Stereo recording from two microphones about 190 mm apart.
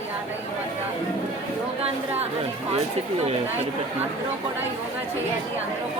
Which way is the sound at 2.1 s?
30° right (ahead or behind).